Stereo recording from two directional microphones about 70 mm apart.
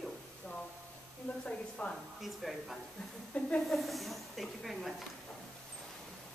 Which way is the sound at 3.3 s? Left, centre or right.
Centre.